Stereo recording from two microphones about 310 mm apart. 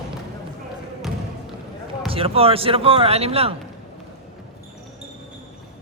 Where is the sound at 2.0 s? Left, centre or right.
Centre.